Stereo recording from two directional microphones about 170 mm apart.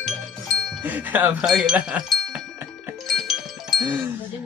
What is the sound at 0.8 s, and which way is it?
Speech, 10° right (ahead or behind).